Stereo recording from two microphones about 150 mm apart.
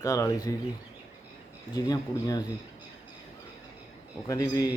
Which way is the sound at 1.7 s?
25° left (ahead or behind).